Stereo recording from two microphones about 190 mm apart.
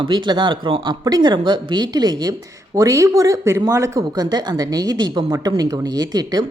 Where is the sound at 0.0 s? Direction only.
25° right (ahead or behind).